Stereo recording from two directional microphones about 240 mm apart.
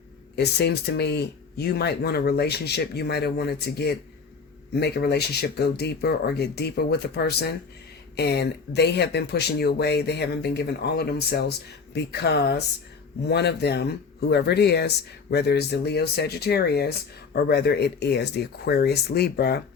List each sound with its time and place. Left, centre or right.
0.3 s speech: left